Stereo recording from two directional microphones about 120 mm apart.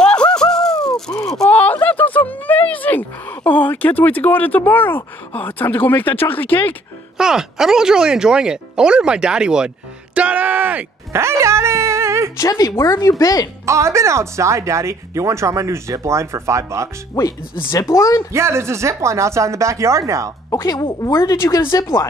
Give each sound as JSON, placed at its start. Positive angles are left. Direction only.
{"t": 0.0, "sound": "a sound", "side_deg": 5}
{"t": 1.2, "sound": "speech", "side_deg": 5}
{"t": 7.2, "sound": "speech", "side_deg": -5}
{"t": 12.4, "sound": "speech", "side_deg": 30}
{"t": 13.7, "sound": "speech", "side_deg": -25}
{"t": 17.1, "sound": "speech", "side_deg": 25}
{"t": 18.3, "sound": "speech", "side_deg": -20}
{"t": 20.4, "sound": "a woman's voice", "side_deg": 30}